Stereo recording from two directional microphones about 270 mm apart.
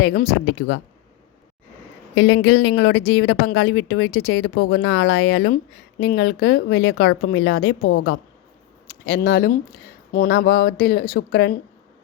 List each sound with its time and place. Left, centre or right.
0.0 s a woman's voice: left
2.1 s a woman's voice: left
7.9 s a woman's voice: left
9.0 s a woman's voice: left